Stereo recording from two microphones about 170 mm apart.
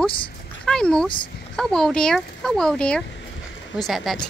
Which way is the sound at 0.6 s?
5° left (ahead or behind).